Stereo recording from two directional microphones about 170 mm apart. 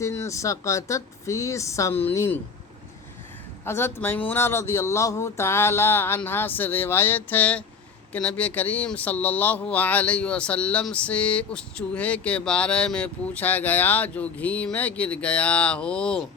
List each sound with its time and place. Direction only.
0.0 s speech: 20° left (ahead or behind)
3.7 s speech: 15° left (ahead or behind)